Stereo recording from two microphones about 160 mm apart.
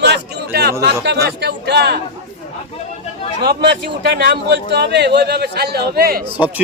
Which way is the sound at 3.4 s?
90° right.